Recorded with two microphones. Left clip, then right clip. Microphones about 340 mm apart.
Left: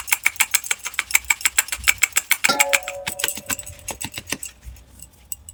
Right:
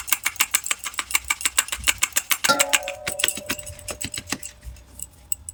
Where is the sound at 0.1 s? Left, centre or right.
Centre.